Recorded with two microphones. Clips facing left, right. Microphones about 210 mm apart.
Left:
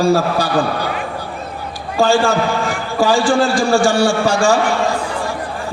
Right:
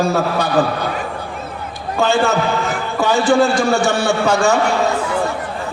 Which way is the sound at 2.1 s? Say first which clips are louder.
Right 1 dB; 20° right (ahead or behind).